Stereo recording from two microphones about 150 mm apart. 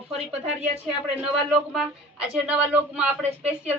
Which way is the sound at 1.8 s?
5° right (ahead or behind).